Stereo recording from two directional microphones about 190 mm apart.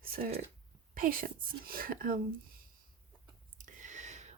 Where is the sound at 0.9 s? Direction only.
50° right (ahead or behind).